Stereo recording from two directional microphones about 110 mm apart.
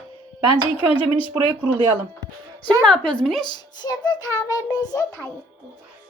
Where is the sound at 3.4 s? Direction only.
40° left (ahead or behind).